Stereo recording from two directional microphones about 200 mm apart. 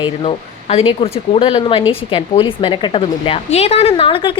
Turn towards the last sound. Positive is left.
turn(degrees=25)  # may be behind; listen again after turning